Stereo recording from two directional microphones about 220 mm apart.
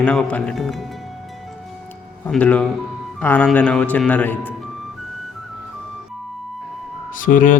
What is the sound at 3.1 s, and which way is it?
Speech, 5° left (ahead or behind).